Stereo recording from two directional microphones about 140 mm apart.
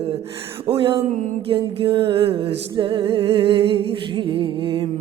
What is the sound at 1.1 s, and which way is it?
Music, 60° right (ahead or behind).